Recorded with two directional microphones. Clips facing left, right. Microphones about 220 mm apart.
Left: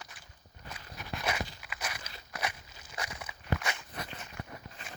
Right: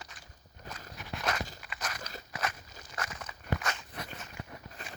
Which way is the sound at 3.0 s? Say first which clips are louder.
Even; 10° left (ahead or behind).